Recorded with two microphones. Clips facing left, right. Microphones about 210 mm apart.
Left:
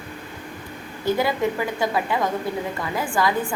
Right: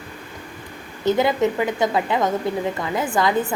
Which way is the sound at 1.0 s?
20° right (ahead or behind).